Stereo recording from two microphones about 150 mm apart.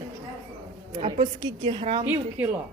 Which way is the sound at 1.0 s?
35° right (ahead or behind).